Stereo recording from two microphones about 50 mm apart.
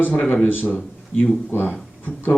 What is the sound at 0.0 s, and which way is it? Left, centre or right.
A man's voice, left.